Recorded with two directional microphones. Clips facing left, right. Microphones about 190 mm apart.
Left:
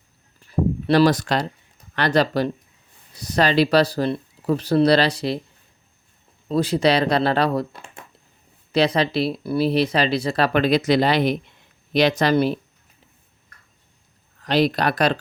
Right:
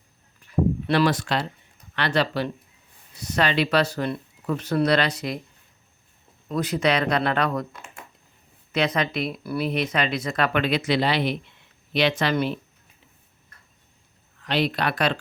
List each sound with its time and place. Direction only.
0.5 s speech: 40° left (ahead or behind)
6.5 s speech: 30° left (ahead or behind)
14.4 s speech: 40° left (ahead or behind)